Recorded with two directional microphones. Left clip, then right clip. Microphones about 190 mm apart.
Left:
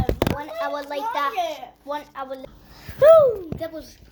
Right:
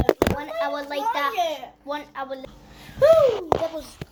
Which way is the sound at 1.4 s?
40° right (ahead or behind).